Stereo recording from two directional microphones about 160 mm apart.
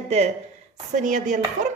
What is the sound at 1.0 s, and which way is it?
Chopping, 50° right (ahead or behind).